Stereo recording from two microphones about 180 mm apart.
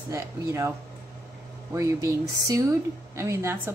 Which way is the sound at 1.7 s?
15° right (ahead or behind).